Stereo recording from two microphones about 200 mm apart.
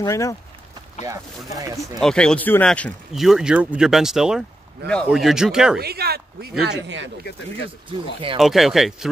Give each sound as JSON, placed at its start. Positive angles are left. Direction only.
{"t": 0.0, "sound": "speech", "side_deg": 15}
{"t": 2.0, "sound": "speech", "side_deg": 5}
{"t": 5.8, "sound": "a woman's voice", "side_deg": -50}
{"t": 8.4, "sound": "speech", "side_deg": 0}